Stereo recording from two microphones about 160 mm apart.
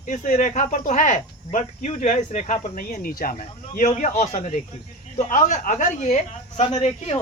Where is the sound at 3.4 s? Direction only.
45° left (ahead or behind).